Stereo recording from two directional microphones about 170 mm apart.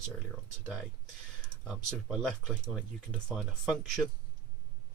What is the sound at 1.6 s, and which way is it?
Speech, centre (ahead or behind).